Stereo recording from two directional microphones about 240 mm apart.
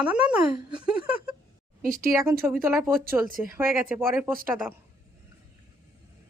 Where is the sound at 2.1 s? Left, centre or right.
Centre.